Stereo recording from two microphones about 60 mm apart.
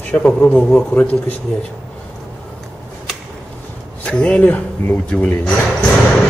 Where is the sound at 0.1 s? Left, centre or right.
Left.